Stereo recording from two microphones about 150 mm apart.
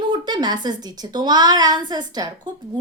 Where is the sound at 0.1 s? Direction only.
30° right (ahead or behind).